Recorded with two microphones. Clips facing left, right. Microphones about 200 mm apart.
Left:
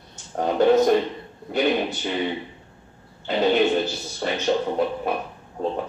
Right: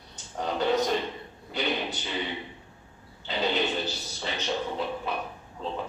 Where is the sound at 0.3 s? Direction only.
50° left (ahead or behind).